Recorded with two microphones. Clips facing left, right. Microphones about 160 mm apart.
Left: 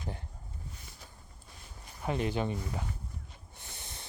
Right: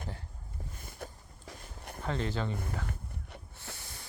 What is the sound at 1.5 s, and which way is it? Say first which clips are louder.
Walk: right 8 dB; 60° right (ahead or behind).